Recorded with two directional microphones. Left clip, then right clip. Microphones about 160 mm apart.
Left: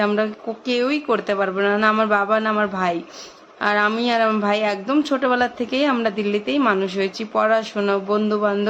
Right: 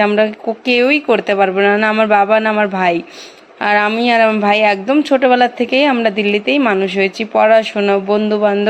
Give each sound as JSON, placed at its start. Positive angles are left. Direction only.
{"t": 0.0, "sound": "a woman's voice", "side_deg": -25}